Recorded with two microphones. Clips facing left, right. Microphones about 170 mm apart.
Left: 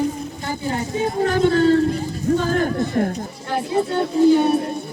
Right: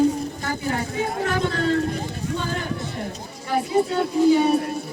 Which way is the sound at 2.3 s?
45° left (ahead or behind).